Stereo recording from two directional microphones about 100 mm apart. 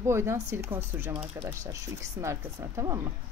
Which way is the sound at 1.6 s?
30° right (ahead or behind).